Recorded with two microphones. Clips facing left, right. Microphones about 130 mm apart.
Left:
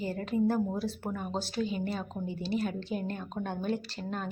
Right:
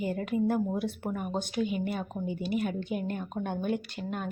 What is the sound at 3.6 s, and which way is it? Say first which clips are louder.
Speech: right 1 dB; 30° left (ahead or behind).